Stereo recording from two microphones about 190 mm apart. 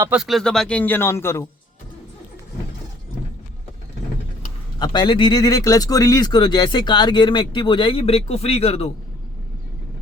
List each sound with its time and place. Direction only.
0.1 s a man's voice: centre (ahead or behind); by 1.5 s 15° left (ahead or behind)
4.8 s speech: 25° left (ahead or behind)